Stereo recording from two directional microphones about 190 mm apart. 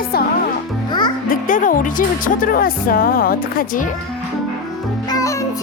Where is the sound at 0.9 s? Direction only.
25° left (ahead or behind).